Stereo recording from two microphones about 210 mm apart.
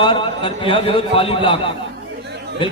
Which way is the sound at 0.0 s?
25° left (ahead or behind).